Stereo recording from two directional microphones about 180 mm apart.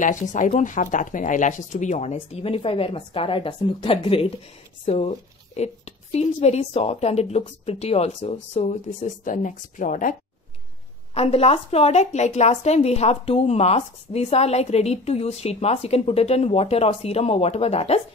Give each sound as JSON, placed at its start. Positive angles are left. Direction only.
{"t": 0.0, "sound": "speech", "side_deg": 45}
{"t": 11.1, "sound": "speech", "side_deg": 35}